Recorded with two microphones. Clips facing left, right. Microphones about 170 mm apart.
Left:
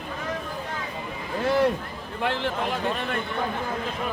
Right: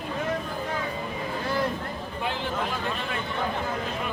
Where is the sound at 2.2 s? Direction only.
70° left (ahead or behind).